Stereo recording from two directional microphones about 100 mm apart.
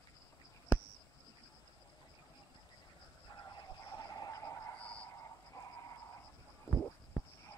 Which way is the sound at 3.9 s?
40° left (ahead or behind).